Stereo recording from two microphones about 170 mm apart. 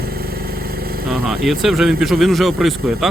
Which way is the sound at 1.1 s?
Centre (ahead or behind).